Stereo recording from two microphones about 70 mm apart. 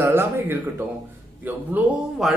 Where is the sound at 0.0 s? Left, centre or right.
Right.